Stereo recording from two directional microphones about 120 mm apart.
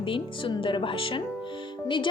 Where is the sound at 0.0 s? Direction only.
45° left (ahead or behind).